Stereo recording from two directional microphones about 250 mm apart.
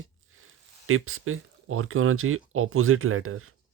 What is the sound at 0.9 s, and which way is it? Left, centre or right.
Speech, right.